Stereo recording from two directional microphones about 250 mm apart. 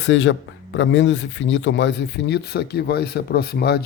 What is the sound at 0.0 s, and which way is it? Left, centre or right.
Speech, left.